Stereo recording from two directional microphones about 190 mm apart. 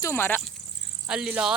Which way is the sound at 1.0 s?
5° right (ahead or behind).